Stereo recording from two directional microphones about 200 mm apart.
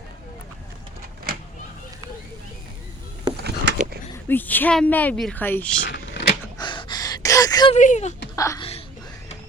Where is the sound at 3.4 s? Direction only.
55° right (ahead or behind).